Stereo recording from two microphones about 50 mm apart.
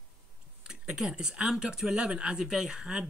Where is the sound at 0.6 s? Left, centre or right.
Centre.